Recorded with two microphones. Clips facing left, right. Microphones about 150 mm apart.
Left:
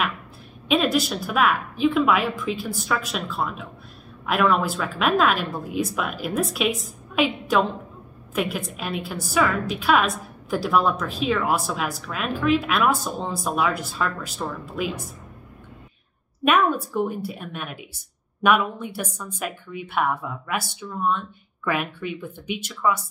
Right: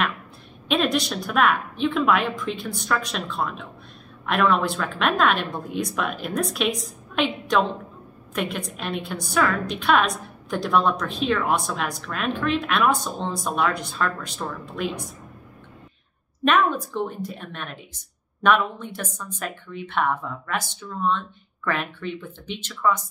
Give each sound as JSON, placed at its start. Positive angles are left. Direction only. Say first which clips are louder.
{"t": 0.7, "sound": "a woman's voice", "louder": "left 2 dB", "side_deg": 5}
{"t": 16.4, "sound": "speech", "louder": "left 1 dB", "side_deg": 10}